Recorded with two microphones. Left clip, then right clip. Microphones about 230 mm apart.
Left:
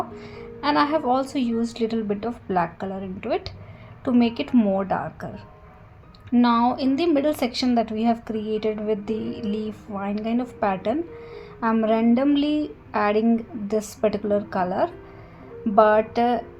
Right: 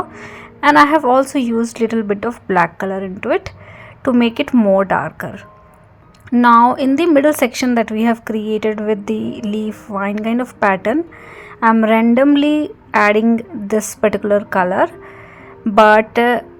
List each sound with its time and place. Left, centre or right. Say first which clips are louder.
0.6 s a woman's voice: right 11 dB; right
9.3 s a sound: right 6 dB; right
9.9 s a woman's voice: right 8 dB; right